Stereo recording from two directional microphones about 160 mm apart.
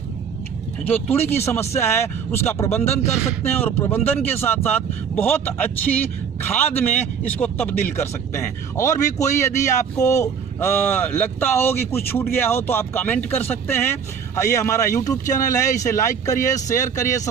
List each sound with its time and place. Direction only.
0.9 s speech: 10° left (ahead or behind)
1.2 s speech: 40° left (ahead or behind)
1.5 s speech: 15° left (ahead or behind)